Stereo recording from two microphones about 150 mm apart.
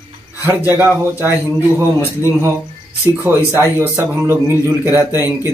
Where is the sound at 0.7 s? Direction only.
15° right (ahead or behind).